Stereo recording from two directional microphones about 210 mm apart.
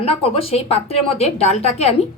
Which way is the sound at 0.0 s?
25° left (ahead or behind).